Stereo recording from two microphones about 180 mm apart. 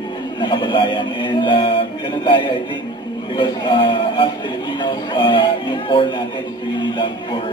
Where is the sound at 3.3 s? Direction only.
25° left (ahead or behind).